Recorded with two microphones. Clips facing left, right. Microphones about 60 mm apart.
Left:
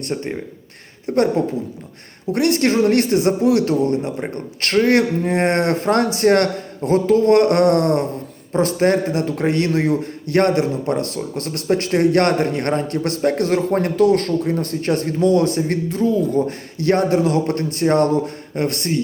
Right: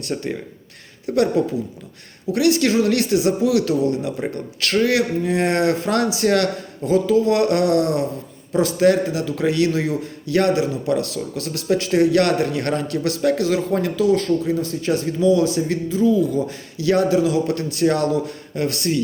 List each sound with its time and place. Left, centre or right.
0.1 s speech: centre
1.0 s a man's voice: left